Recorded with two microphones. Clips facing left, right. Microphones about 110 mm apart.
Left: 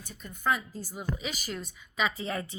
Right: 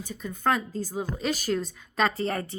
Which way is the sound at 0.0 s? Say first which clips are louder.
Right 5 dB; 90° right.